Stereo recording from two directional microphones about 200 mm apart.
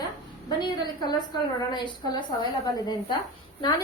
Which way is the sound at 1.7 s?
20° left (ahead or behind).